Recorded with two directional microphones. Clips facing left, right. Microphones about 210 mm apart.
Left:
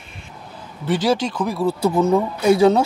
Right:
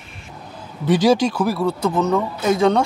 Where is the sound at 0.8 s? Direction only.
15° right (ahead or behind).